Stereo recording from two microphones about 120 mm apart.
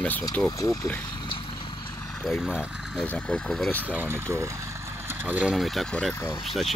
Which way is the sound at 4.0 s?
20° right (ahead or behind).